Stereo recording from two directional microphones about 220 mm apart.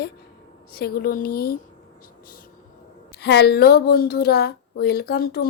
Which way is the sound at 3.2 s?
50° left (ahead or behind).